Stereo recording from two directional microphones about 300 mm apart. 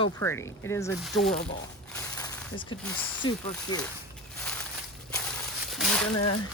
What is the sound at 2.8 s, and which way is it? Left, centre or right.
Speech, centre.